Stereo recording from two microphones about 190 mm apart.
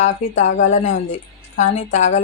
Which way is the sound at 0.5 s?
40° left (ahead or behind).